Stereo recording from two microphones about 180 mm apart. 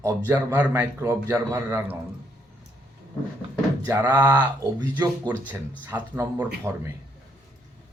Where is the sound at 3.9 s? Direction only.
15° right (ahead or behind).